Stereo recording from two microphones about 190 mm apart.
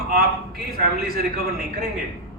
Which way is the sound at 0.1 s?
50° right (ahead or behind).